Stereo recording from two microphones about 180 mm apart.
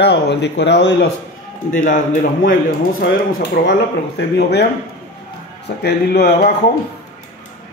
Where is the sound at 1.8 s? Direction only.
45° left (ahead or behind).